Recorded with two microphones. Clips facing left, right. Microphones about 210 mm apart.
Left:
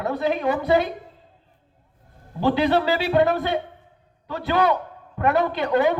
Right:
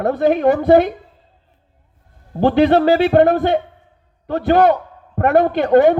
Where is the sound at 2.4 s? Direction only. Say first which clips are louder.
Right 7 dB; 55° right (ahead or behind).